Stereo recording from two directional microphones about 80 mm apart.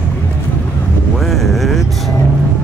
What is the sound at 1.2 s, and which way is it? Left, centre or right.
Vehicle, centre.